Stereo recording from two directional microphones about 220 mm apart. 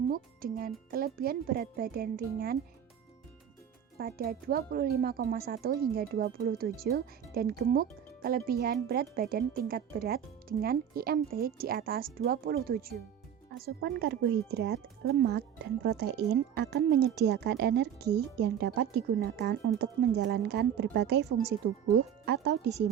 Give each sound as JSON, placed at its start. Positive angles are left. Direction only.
{"t": 0.1, "sound": "speech", "side_deg": -40}
{"t": 3.9, "sound": "speech", "side_deg": -45}